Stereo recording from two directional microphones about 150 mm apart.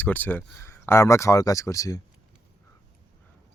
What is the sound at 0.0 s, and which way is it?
Speech, 10° left (ahead or behind).